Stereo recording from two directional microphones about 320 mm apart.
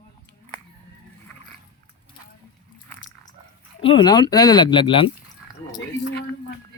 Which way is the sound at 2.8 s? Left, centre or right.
Centre.